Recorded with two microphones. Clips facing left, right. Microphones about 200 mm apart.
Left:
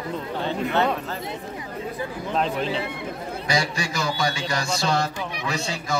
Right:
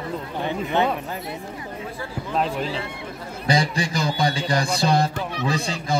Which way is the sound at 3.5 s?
35° right (ahead or behind).